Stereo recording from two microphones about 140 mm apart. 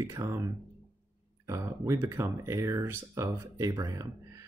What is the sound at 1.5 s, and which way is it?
Speech, 20° right (ahead or behind).